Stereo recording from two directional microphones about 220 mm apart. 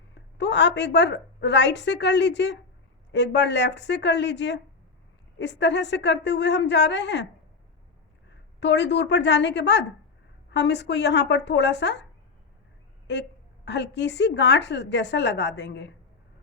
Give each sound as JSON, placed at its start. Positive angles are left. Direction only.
{"t": 0.1, "sound": "a woman's voice", "side_deg": 50}
{"t": 8.3, "sound": "a woman's voice", "side_deg": 50}
{"t": 13.7, "sound": "a woman's voice", "side_deg": 50}